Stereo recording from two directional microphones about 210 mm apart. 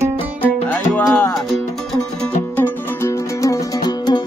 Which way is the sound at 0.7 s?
10° left (ahead or behind).